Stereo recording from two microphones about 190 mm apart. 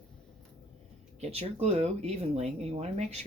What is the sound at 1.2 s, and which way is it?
Speech, 35° right (ahead or behind).